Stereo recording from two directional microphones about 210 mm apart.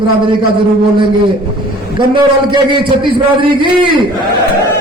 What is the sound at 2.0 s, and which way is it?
A man's voice, 20° right (ahead or behind).